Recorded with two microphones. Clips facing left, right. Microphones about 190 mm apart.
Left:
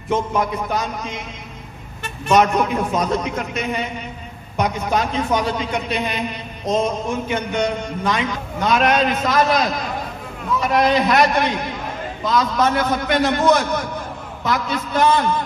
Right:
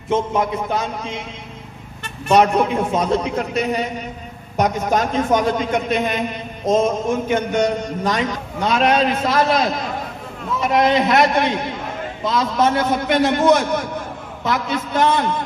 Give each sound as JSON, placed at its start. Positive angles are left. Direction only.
{"t": 0.1, "sound": "a man's voice", "side_deg": -25}
{"t": 2.2, "sound": "a man's voice", "side_deg": -30}
{"t": 8.6, "sound": "a man's voice", "side_deg": -30}